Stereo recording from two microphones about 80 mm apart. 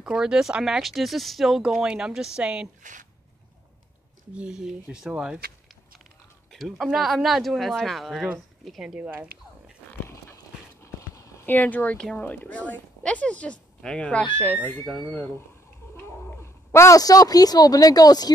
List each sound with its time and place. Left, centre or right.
0.0 s speech: centre
4.3 s speech: centre
6.5 s speech: centre
10.8 s horse: left
11.4 s speech: left
16.7 s speech: left